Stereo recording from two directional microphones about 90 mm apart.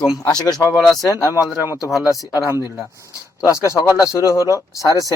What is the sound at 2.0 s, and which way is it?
A man's voice, 40° left (ahead or behind).